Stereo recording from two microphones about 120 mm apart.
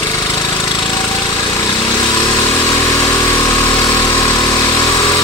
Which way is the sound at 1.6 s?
30° left (ahead or behind).